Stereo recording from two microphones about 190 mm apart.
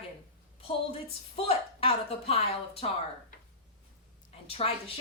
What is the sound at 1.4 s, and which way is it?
Speech, 30° left (ahead or behind).